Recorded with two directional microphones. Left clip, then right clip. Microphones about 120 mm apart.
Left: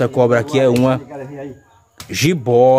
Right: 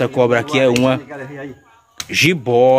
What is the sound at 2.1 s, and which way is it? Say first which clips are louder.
Speech: right 1 dB; 15° left (ahead or behind).